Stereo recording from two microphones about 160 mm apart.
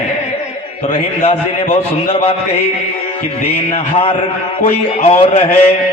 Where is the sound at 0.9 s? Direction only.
40° left (ahead or behind).